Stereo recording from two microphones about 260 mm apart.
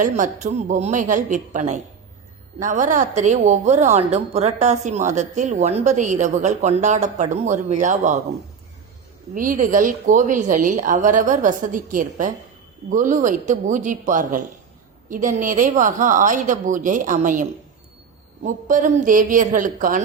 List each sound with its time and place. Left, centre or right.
0.0 s a woman's voice: right
9.3 s a woman's voice: right
18.4 s a woman's voice: right